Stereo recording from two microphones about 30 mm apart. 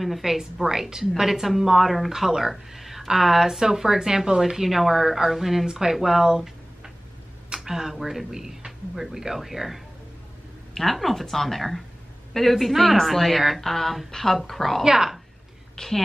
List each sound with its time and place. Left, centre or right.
0.2 s a woman's voice: centre
3.4 s a woman's voice: centre
4.6 s a woman's voice: centre
5.7 s speech: right
5.9 s a woman's voice: centre
6.2 s a woman's voice: centre
7.5 s a sound: centre
7.9 s a woman's voice: centre
10.7 s a woman's voice: centre
14.8 s a woman's voice: centre
15.7 s a sound: centre